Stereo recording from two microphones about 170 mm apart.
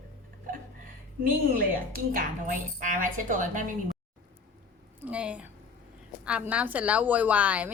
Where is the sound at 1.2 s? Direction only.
55° right (ahead or behind).